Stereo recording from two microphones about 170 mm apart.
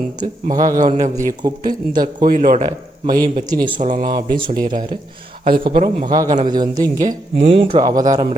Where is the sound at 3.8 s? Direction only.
50° right (ahead or behind).